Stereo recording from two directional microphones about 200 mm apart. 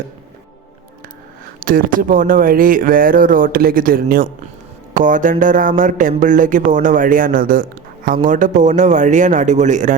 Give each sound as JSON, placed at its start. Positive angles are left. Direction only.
{"t": 1.5, "sound": "speech", "side_deg": -45}